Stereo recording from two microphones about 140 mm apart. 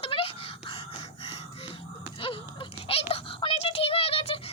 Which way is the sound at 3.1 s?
40° left (ahead or behind).